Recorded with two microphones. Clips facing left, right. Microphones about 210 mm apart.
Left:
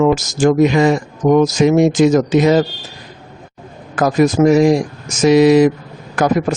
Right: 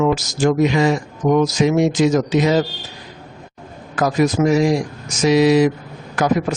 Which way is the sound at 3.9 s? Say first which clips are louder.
Left 4 dB; 50° left (ahead or behind).